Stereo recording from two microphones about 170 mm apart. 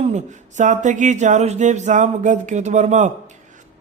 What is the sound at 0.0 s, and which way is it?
Speech, 45° right (ahead or behind).